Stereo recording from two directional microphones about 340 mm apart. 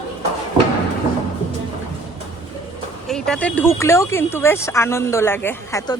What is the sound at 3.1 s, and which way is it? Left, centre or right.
Speech, centre.